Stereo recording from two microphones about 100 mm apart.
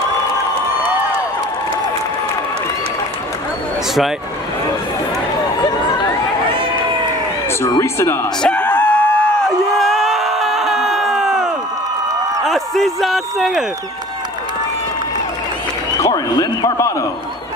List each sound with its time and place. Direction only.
6.5 s run: 60° right (ahead or behind)
7.6 s speech: 30° left (ahead or behind)
8.4 s a sound: 10° left (ahead or behind)
9.8 s a sound: centre (ahead or behind)
12.4 s a man's voice: centre (ahead or behind)
16.1 s speech: 45° left (ahead or behind)